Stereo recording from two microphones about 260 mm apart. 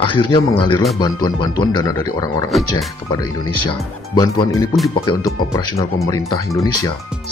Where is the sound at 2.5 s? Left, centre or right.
Centre.